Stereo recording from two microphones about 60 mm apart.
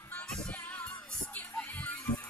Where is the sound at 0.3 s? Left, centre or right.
Centre.